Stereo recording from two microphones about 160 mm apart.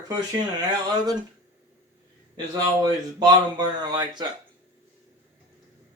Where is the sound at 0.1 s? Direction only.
25° right (ahead or behind).